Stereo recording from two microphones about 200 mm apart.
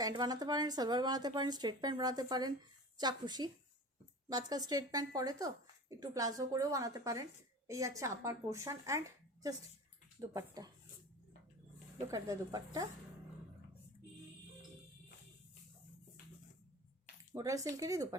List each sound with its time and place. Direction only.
0.0 s speech: 20° right (ahead or behind)
12.1 s speech: 15° right (ahead or behind)
17.3 s speech: 15° right (ahead or behind)